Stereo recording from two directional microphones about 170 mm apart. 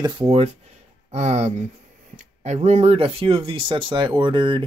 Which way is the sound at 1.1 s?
40° right (ahead or behind).